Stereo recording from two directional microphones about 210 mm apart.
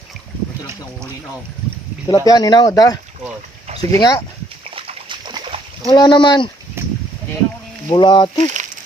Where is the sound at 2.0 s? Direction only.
20° left (ahead or behind).